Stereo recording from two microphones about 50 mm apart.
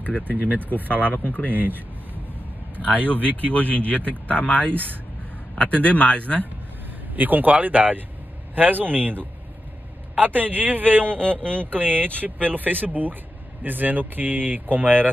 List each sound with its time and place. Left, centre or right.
0.3 s speech: right
1.1 s speech: left
1.5 s speech: right
3.3 s speech: left
7.2 s speech: right
11.3 s speech: left
11.6 s speech: right